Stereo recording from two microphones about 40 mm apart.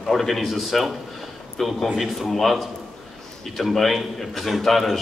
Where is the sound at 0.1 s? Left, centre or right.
Centre.